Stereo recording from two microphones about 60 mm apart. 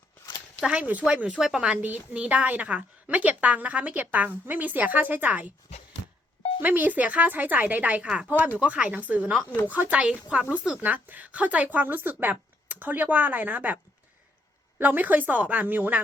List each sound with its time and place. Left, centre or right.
0.6 s a woman's voice: centre
1.4 s speech: centre
1.7 s a woman's voice: right
6.6 s a woman's voice: right
8.0 s a woman's voice: centre
10.0 s a woman's voice: centre
14.8 s a woman's voice: right